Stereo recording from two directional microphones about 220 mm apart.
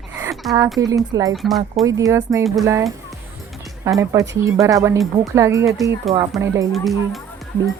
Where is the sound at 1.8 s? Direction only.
15° right (ahead or behind).